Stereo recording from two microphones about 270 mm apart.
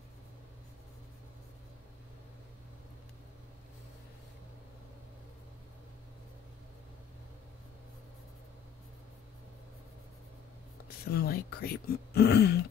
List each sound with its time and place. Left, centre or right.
10.9 s speech: left